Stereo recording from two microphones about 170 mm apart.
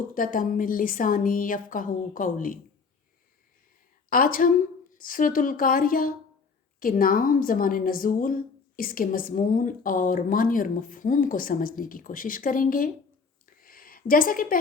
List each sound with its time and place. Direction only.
0.1 s a woman's voice: 55° left (ahead or behind)
4.1 s a woman's voice: 55° left (ahead or behind)
13.4 s a sound: 60° left (ahead or behind)